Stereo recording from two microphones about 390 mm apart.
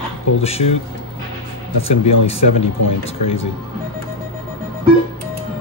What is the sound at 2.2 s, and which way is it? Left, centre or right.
Speech, centre.